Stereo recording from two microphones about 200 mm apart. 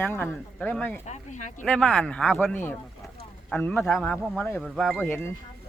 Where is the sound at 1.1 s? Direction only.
35° left (ahead or behind).